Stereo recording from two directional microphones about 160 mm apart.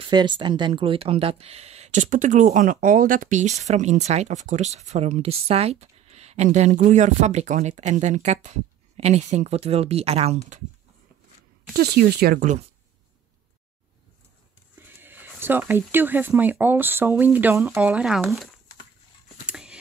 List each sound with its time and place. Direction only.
0.0 s speech: 30° right (ahead or behind)
11.7 s speech: 85° right
14.8 s speech: 10° right (ahead or behind)
19.4 s a sound: 5° right (ahead or behind)